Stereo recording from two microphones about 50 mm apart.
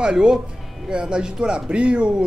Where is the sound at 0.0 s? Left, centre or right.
Centre.